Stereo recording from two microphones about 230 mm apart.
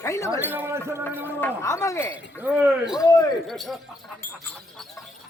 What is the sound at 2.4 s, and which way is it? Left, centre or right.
Speech, centre.